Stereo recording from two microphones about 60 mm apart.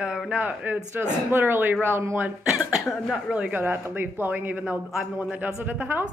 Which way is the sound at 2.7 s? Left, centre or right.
Centre.